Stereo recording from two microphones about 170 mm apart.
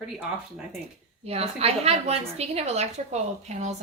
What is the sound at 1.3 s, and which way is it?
A woman's voice, 35° right (ahead or behind).